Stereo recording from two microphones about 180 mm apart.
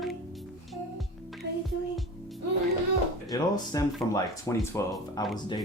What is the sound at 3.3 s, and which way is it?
Speech, 20° left (ahead or behind).